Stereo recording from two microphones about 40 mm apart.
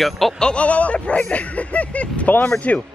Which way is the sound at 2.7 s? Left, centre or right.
Left.